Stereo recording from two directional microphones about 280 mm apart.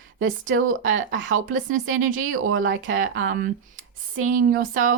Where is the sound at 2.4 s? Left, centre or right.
Right.